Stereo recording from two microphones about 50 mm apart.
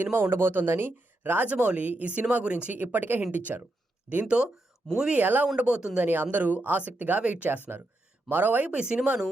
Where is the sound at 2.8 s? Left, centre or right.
Right.